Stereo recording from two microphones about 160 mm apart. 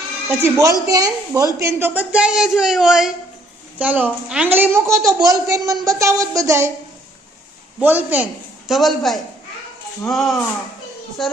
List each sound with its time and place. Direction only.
0.3 s a woman's voice: 15° right (ahead or behind)
7.8 s a man's voice: 10° right (ahead or behind)